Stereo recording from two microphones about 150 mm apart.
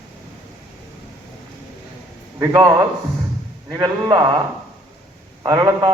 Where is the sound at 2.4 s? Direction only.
25° right (ahead or behind).